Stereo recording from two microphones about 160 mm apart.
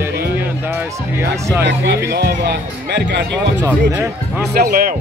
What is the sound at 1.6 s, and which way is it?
Speech, 90° right.